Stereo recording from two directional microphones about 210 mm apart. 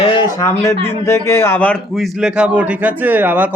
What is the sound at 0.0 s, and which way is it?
A man's voice, 25° left (ahead or behind).